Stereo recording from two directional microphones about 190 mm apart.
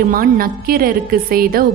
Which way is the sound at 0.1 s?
50° right (ahead or behind).